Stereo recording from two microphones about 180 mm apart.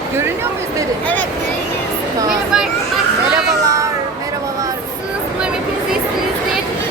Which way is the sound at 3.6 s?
15° right (ahead or behind).